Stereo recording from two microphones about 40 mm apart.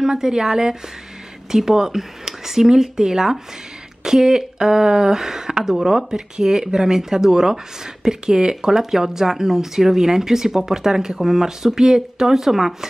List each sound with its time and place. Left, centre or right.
0.0 s speech: centre